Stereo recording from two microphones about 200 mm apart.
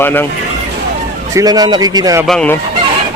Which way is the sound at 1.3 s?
20° right (ahead or behind).